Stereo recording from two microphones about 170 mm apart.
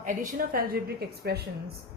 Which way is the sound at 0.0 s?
50° right (ahead or behind).